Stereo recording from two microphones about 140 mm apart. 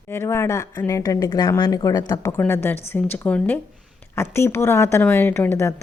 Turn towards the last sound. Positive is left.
turn(degrees=20)  # may be behind; listen again after turning